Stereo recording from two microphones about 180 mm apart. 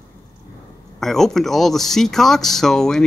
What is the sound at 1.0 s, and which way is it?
Speech, centre (ahead or behind).